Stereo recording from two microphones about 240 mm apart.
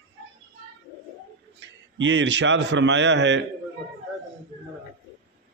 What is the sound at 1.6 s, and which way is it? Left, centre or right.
A man's voice, right.